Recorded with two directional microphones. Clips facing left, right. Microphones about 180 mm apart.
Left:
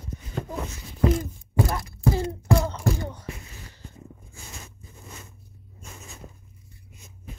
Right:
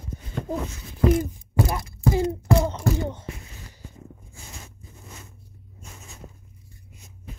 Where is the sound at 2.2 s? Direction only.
20° right (ahead or behind).